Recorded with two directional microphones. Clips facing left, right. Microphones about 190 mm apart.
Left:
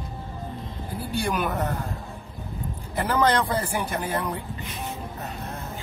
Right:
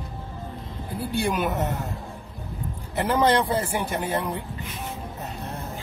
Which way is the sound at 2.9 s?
25° right (ahead or behind).